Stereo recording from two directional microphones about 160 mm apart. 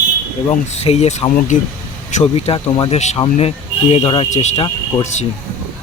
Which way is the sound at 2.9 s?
45° left (ahead or behind).